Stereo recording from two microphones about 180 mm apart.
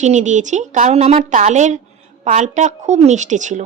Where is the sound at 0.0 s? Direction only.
40° right (ahead or behind).